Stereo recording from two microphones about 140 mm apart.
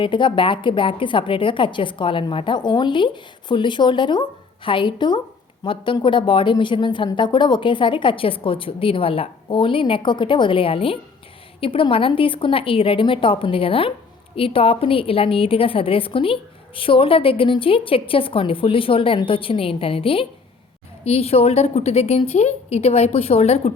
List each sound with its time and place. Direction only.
0.0 s a woman's voice: 35° left (ahead or behind)